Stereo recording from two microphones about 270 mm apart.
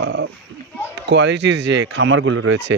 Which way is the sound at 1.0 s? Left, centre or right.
Right.